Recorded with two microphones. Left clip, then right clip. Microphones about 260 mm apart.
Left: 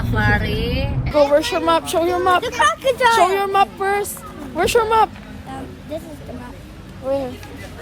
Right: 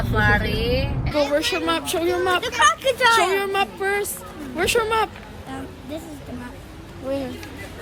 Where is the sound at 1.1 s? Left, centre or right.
Centre.